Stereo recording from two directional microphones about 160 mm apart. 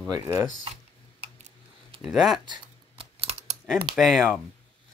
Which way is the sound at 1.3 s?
45° right (ahead or behind).